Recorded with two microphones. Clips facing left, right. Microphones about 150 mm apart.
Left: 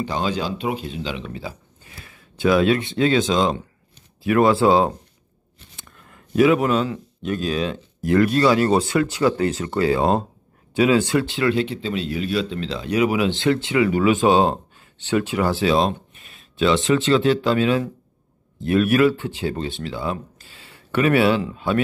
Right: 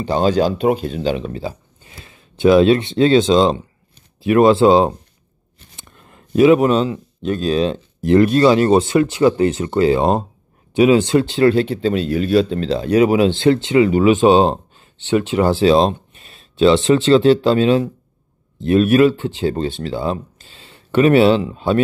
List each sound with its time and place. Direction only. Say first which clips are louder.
0.0 s speech: right 8 dB; 40° right (ahead or behind)
1.8 s speech: right 2 dB; 25° right (ahead or behind)